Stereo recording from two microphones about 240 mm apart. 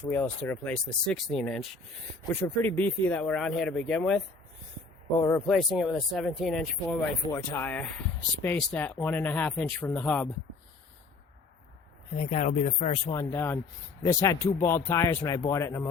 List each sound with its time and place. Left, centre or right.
0.1 s speech: centre
5.5 s speech: centre
12.1 s speech: left; by 15.9 s centre